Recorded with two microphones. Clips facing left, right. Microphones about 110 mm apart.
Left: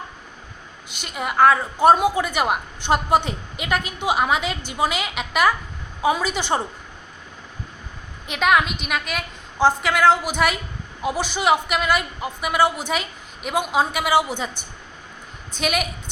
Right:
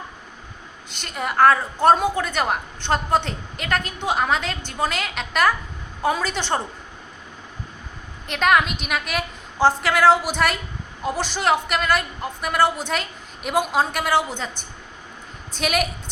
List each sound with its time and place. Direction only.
0.9 s a woman's voice: 5° left (ahead or behind)
8.3 s a woman's voice: centre (ahead or behind)
15.5 s a woman's voice: centre (ahead or behind)